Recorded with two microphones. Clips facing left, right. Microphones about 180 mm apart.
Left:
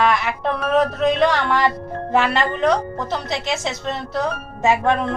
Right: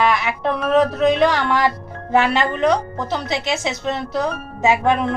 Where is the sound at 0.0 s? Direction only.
Centre (ahead or behind).